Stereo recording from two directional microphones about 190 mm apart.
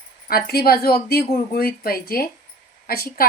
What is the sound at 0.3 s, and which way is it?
Speech, 55° left (ahead or behind).